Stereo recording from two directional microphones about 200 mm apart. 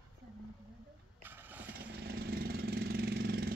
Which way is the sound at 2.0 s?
50° right (ahead or behind).